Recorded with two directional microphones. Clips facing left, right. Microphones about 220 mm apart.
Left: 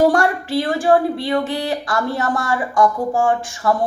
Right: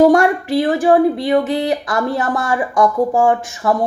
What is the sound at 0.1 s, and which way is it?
Speech, 20° right (ahead or behind).